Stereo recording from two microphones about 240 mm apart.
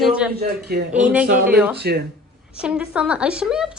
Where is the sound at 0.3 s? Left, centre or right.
Right.